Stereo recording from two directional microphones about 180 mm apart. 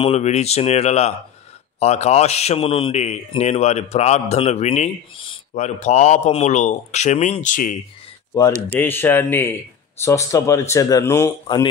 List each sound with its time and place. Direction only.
0.0 s a man's voice: 35° left (ahead or behind)
8.7 s speech: 10° left (ahead or behind)
11.4 s speech: 25° left (ahead or behind)